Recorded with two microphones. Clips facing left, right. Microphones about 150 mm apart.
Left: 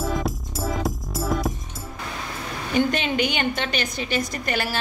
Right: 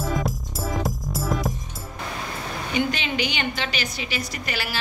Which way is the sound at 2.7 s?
50° left (ahead or behind).